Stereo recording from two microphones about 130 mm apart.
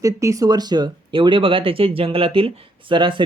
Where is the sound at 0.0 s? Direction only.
25° right (ahead or behind).